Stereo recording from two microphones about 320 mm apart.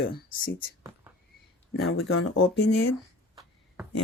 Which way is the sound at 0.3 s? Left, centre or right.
Left.